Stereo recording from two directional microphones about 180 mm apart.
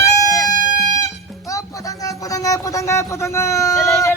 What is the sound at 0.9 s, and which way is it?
Speech, 20° left (ahead or behind).